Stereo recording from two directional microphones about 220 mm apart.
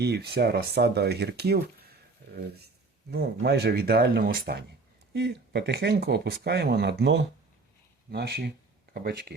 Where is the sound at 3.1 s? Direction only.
50° right (ahead or behind).